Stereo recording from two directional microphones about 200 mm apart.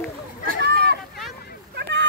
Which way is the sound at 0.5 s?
55° right (ahead or behind).